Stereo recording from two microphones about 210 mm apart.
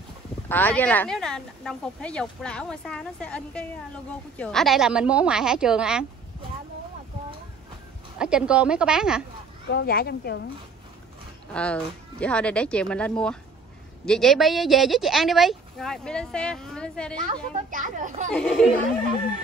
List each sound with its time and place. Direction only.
0.5 s speech: 10° left (ahead or behind)
8.2 s speech: 5° right (ahead or behind)
9.7 s a woman's voice: 50° left (ahead or behind)
11.5 s speech: 5° left (ahead or behind)
17.2 s a child's voice: 40° right (ahead or behind)
18.3 s speech: 5° left (ahead or behind)